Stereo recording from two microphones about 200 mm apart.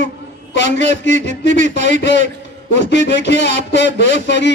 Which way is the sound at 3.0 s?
60° left (ahead or behind).